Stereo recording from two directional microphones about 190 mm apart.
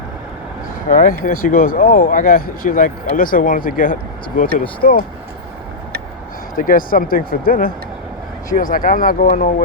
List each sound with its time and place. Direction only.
0.9 s speech: 45° left (ahead or behind)
6.6 s speech: 45° left (ahead or behind)